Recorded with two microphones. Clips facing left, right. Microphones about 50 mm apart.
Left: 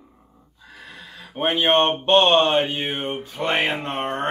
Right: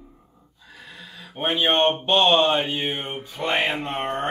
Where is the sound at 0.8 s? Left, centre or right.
Left.